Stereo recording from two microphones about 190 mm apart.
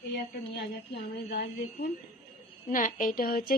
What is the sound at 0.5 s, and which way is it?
A woman's voice, 60° left (ahead or behind).